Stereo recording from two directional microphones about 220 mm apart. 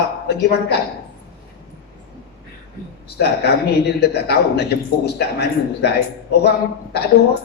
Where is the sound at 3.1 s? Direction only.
45° left (ahead or behind).